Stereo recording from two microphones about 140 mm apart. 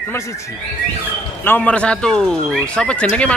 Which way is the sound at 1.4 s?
10° left (ahead or behind).